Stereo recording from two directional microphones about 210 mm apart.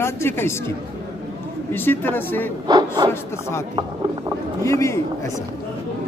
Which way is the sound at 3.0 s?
20° right (ahead or behind).